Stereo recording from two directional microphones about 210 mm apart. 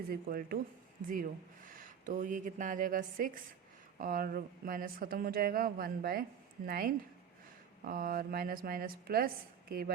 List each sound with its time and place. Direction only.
0.1 s speech: 45° right (ahead or behind)